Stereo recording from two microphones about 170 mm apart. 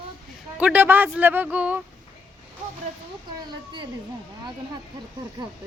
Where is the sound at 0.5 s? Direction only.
10° right (ahead or behind).